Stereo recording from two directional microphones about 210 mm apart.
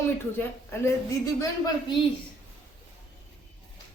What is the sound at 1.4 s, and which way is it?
Speech, 20° left (ahead or behind).